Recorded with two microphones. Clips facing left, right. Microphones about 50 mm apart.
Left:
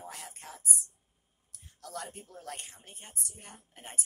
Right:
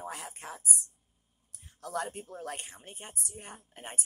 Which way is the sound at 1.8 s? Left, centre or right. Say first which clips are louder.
Right 6 dB; right.